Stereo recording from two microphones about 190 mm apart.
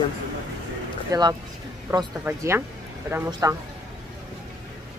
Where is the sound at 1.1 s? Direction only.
20° right (ahead or behind).